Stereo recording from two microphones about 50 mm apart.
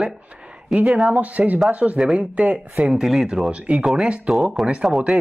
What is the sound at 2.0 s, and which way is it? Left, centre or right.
Speech, centre.